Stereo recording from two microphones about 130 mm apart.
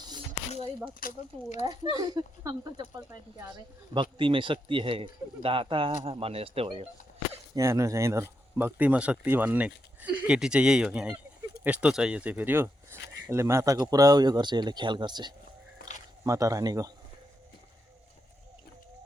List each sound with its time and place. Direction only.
0.9 s speech: 75° left (ahead or behind)
1.6 s speech: 30° right (ahead or behind)
4.2 s speech: 40° right (ahead or behind)
7.5 s speech: 20° right (ahead or behind)
16.2 s speech: 25° right (ahead or behind)